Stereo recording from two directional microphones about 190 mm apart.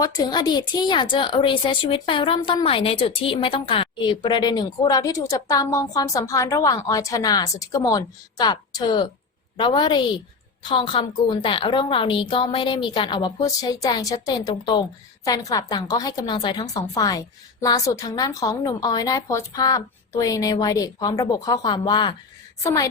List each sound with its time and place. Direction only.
0.0 s a woman's voice: 20° left (ahead or behind)